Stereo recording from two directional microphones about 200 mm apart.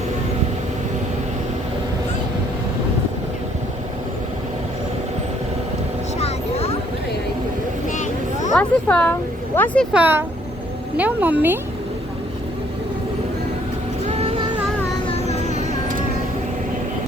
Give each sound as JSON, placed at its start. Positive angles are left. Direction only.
{"t": 6.1, "sound": "vehicle", "side_deg": 30}
{"t": 8.5, "sound": "speech", "side_deg": 5}
{"t": 9.9, "sound": "speech", "side_deg": -10}
{"t": 14.1, "sound": "vehicle", "side_deg": -30}
{"t": 15.0, "sound": "a sound", "side_deg": 30}
{"t": 15.5, "sound": "music", "side_deg": -40}